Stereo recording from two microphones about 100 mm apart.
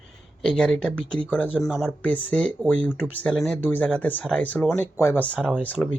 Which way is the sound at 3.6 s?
15° left (ahead or behind).